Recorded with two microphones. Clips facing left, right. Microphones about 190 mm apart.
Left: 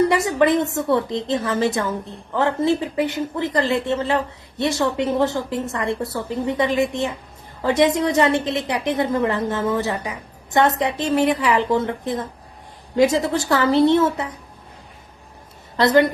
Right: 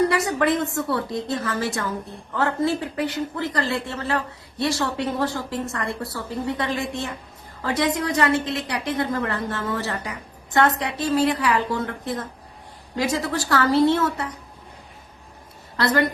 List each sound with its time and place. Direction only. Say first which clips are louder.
0.1 s a woman's voice: left 4 dB; 20° left (ahead or behind)
15.8 s a woman's voice: left 6 dB; 20° left (ahead or behind)